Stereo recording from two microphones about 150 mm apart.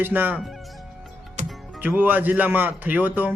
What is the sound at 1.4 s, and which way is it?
Music, 55° right (ahead or behind).